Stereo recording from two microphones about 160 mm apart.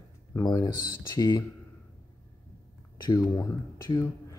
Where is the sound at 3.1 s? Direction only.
20° left (ahead or behind).